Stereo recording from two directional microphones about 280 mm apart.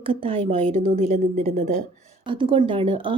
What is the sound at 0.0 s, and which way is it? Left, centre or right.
A woman's voice, centre.